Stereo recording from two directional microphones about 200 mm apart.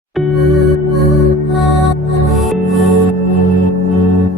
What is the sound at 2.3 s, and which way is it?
Music, centre (ahead or behind).